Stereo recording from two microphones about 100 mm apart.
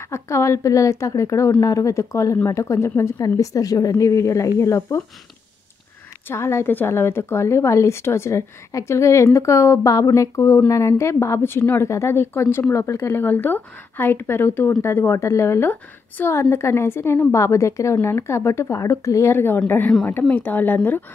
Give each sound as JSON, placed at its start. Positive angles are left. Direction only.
{"t": 0.0, "sound": "speech", "side_deg": 25}
{"t": 6.2, "sound": "a woman's voice", "side_deg": 25}